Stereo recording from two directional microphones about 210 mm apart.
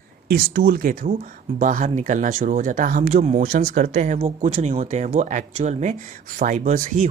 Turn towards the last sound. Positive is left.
turn(degrees=-35)  # may be behind; listen again after turning